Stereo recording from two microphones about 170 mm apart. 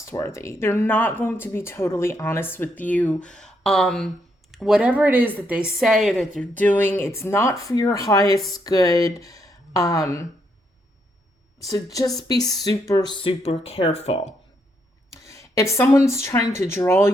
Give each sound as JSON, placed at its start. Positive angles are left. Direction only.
{"t": 0.0, "sound": "speech", "side_deg": 15}
{"t": 11.6, "sound": "a woman's voice", "side_deg": 20}
{"t": 15.3, "sound": "speech", "side_deg": 20}